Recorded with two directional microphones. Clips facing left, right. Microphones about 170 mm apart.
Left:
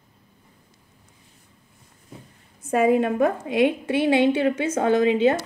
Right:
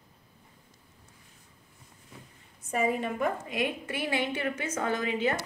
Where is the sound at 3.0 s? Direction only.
85° left.